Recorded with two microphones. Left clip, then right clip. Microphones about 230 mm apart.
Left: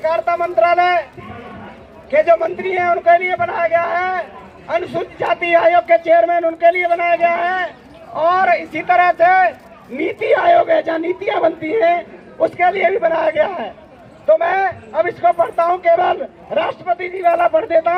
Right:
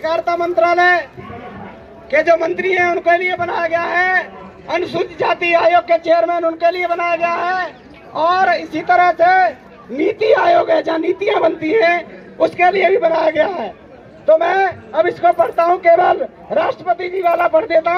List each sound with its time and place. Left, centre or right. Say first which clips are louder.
0.0 s speech: even; right
2.0 s speech: even; right